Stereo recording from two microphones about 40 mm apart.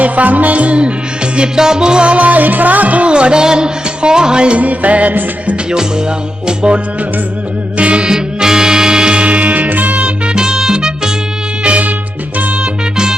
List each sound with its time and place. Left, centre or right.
0.0 s music: right
1.4 s music: centre; by 3.1 s right
3.1 s music: right
4.6 s music: right
7.8 s music: right
8.1 s music: centre
9.2 s music: right
10.0 s music: right
11.6 s music: right